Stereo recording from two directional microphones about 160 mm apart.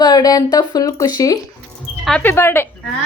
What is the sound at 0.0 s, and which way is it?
Speech, 25° left (ahead or behind).